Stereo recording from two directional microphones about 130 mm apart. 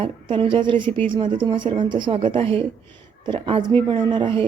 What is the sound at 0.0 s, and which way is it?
A woman's voice, 45° right (ahead or behind).